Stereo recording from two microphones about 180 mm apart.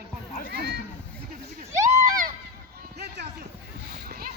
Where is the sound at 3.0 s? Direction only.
65° right (ahead or behind).